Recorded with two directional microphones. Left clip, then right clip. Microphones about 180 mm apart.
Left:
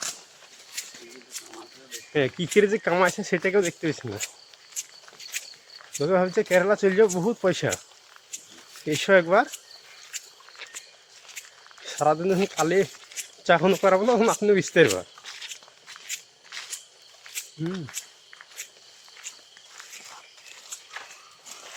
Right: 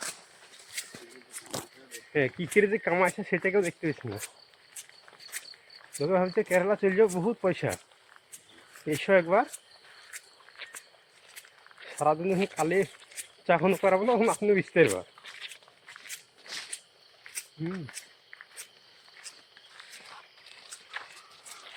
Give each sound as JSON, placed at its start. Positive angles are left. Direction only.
{"t": 2.1, "sound": "speech", "side_deg": 15}
{"t": 6.0, "sound": "speech", "side_deg": 15}
{"t": 9.0, "sound": "speech", "side_deg": 15}
{"t": 11.9, "sound": "speech", "side_deg": 25}